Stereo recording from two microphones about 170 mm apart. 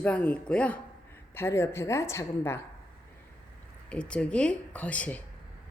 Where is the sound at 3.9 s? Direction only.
5° left (ahead or behind).